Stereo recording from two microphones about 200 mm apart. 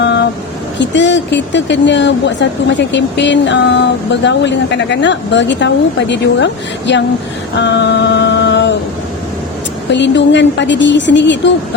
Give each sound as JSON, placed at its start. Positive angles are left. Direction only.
{"t": 0.8, "sound": "a woman's voice", "side_deg": 60}
{"t": 7.5, "sound": "a sound", "side_deg": 60}
{"t": 9.9, "sound": "a woman's voice", "side_deg": 60}